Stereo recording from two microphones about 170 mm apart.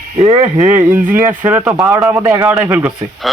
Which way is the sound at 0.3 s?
20° right (ahead or behind).